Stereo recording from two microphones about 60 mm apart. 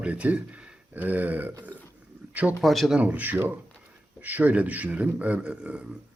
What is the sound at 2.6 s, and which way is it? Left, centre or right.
Speech, centre.